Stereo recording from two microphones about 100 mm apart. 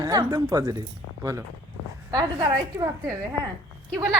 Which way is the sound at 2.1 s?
35° right (ahead or behind).